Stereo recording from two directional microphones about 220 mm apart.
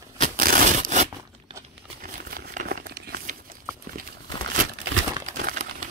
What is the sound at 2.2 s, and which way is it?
Crumpling, 40° right (ahead or behind).